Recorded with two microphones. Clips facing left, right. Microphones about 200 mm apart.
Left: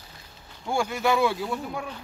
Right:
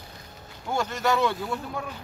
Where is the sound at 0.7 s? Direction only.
10° left (ahead or behind).